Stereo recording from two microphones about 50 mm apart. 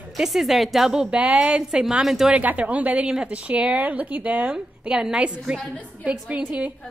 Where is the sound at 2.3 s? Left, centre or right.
Right.